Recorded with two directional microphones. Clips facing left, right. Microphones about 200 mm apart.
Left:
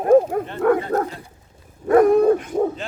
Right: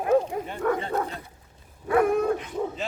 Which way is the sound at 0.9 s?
40° left (ahead or behind).